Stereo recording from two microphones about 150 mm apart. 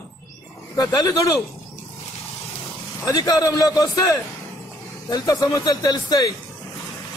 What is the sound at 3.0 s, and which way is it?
A man's voice, 25° left (ahead or behind).